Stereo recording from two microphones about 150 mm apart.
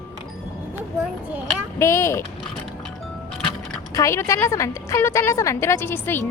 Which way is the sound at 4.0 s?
20° left (ahead or behind).